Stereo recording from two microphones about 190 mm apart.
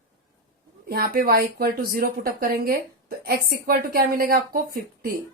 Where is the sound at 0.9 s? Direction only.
50° right (ahead or behind).